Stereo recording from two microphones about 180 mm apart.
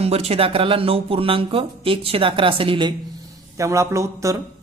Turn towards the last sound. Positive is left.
turn(degrees=-15)  # may be behind; listen again after turning